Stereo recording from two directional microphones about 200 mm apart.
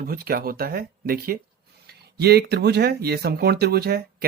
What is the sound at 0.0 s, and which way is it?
Speech, 50° right (ahead or behind).